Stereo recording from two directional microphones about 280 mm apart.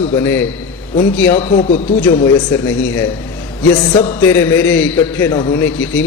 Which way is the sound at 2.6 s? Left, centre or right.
Left.